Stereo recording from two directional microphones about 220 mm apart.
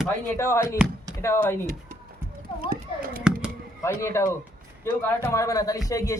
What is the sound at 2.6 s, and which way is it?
Speech, 40° right (ahead or behind).